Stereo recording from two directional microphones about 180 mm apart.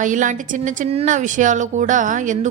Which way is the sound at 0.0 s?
45° right (ahead or behind).